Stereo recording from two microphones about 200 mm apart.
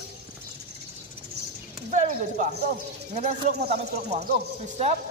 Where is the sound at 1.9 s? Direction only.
40° right (ahead or behind).